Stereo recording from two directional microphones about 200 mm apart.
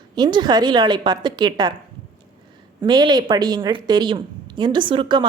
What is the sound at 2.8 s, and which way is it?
A woman's voice, 20° right (ahead or behind).